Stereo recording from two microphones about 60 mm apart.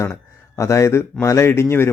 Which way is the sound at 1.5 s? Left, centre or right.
Left.